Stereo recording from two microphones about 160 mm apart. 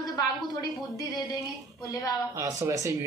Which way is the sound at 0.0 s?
25° left (ahead or behind).